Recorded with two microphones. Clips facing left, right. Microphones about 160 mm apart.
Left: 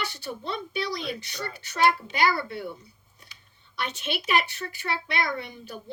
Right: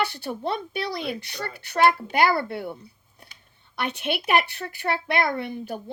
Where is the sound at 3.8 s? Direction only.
55° right (ahead or behind).